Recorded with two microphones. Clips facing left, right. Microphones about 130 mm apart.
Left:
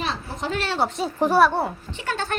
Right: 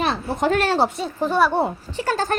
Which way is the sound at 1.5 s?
15° right (ahead or behind).